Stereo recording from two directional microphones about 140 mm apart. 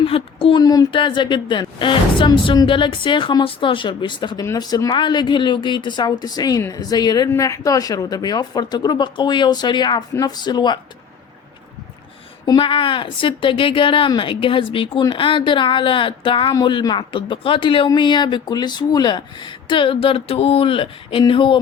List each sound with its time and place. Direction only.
0.0 s a sound: 40° left (ahead or behind)
0.6 s a woman's voice: 25° left (ahead or behind)
12.5 s a woman's voice: 40° left (ahead or behind)